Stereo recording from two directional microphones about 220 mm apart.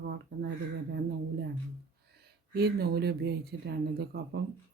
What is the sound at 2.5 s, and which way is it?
Speech, 45° right (ahead or behind).